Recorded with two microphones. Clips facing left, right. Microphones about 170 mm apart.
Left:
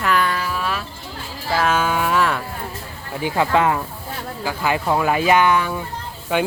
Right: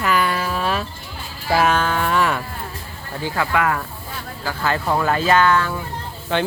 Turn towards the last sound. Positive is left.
turn(degrees=10)  # may be behind; listen again after turning